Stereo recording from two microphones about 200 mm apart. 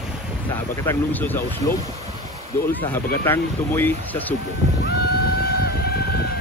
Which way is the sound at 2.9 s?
10° left (ahead or behind).